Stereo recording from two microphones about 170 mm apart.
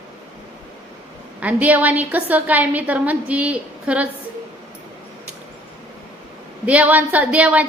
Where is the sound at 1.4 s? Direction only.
10° right (ahead or behind).